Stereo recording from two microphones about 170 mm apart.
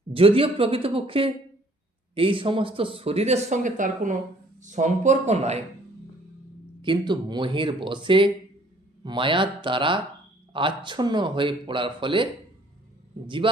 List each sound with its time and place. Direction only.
0.1 s speech: 35° right (ahead or behind)
6.8 s speech: 30° right (ahead or behind)